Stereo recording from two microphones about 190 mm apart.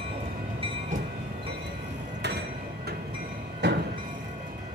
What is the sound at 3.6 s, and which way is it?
Train, 65° right (ahead or behind).